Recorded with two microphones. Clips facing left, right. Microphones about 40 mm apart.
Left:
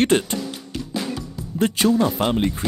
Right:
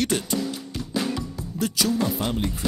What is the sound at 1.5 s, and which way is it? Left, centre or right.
Speech, left.